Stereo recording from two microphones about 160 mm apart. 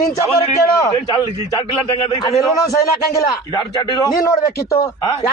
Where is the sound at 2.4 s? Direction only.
20° left (ahead or behind).